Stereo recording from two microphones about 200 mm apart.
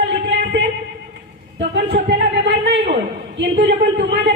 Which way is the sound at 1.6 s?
55° right (ahead or behind).